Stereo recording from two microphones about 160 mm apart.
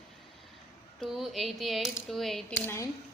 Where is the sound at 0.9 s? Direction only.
Centre (ahead or behind).